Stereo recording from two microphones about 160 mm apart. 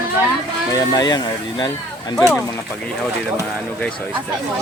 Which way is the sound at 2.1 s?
15° left (ahead or behind).